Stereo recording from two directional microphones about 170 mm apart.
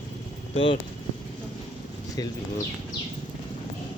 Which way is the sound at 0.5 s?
30° left (ahead or behind).